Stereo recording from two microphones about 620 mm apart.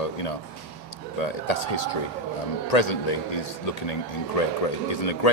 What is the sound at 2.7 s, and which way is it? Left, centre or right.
A man's voice, left.